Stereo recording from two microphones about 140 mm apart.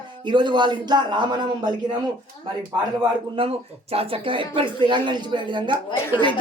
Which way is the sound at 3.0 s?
40° right (ahead or behind).